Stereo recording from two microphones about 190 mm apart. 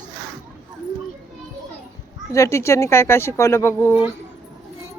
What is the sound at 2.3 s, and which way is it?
Speech, 15° left (ahead or behind).